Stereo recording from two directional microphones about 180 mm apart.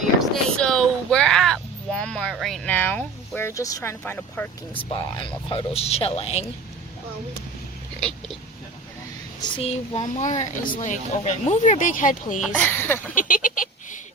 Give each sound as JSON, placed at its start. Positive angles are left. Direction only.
{"t": 0.2, "sound": "a sound", "side_deg": 5}
{"t": 2.3, "sound": "speech", "side_deg": 0}
{"t": 4.7, "sound": "speech", "side_deg": 25}
{"t": 9.6, "sound": "speech", "side_deg": 35}
{"t": 12.4, "sound": "speech", "side_deg": 10}
{"t": 13.1, "sound": "a sound", "side_deg": 45}